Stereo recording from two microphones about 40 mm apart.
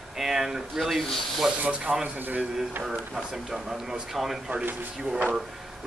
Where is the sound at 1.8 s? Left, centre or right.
Right.